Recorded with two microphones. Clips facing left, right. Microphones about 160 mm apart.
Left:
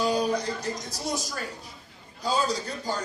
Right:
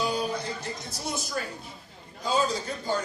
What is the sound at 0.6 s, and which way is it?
A man's voice, 40° left (ahead or behind).